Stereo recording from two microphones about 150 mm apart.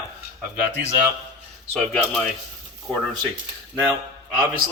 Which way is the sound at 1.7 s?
5° left (ahead or behind).